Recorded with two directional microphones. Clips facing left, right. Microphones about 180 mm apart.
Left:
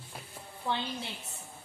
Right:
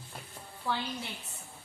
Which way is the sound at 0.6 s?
20° left (ahead or behind).